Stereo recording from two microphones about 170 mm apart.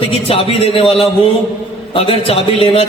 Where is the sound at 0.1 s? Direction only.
35° left (ahead or behind).